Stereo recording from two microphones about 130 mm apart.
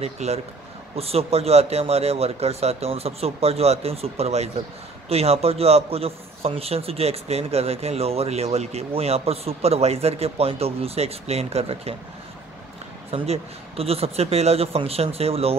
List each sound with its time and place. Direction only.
0.0 s a man's voice: 55° right (ahead or behind)
13.1 s a man's voice: 50° right (ahead or behind)